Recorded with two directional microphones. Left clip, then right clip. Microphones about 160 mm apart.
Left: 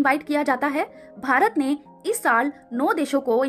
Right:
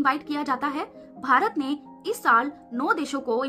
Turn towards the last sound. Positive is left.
turn(degrees=30)  # may be behind; listen again after turning